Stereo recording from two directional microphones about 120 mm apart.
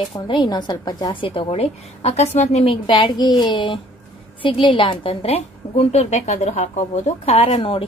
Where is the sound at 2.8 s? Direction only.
40° left (ahead or behind).